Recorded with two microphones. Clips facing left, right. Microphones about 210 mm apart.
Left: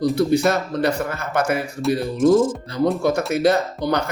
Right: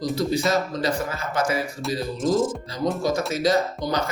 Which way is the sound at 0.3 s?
60° left (ahead or behind).